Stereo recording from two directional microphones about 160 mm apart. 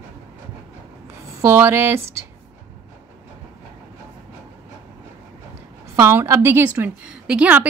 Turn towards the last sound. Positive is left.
turn(degrees=-10)  # may be behind; listen again after turning